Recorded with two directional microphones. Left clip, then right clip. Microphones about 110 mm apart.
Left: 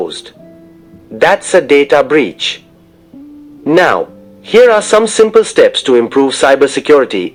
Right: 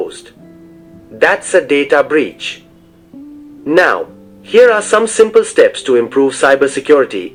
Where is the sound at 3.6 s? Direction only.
40° left (ahead or behind).